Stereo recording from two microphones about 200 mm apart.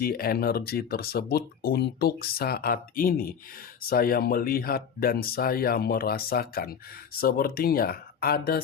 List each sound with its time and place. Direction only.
0.0 s speech: 50° left (ahead or behind)